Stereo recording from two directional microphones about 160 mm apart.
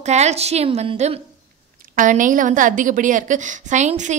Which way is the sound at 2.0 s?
55° right (ahead or behind).